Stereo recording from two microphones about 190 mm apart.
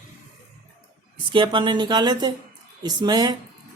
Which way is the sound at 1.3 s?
25° right (ahead or behind).